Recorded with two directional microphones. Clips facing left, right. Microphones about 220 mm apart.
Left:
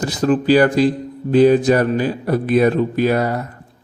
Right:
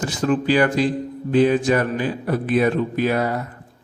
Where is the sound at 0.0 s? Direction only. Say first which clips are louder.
Left 4 dB; 35° left (ahead or behind).